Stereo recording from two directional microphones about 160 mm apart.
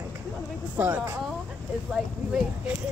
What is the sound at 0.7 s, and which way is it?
Speech, 15° right (ahead or behind).